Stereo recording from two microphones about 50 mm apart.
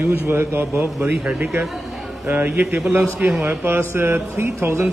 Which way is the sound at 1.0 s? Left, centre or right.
Right.